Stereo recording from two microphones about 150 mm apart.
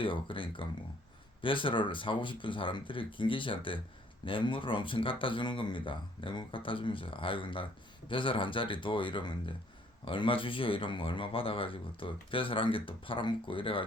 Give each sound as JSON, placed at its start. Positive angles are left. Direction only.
{"t": 0.0, "sound": "speech", "side_deg": 35}